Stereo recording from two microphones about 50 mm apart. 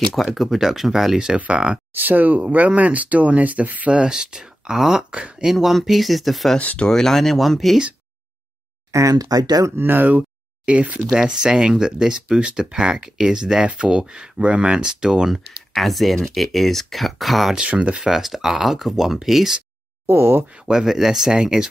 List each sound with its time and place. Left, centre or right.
0.3 s speech: centre; by 1.8 s right
2.0 s speech: right
3.9 s speech: centre
8.9 s speech: right
9.8 s speech: right
11.0 s speech: centre
11.2 s speech: centre
15.3 s speech: centre
17.6 s speech: right
17.9 s speech: centre
20.1 s speech: right
20.4 s speech: centre
20.8 s speech: centre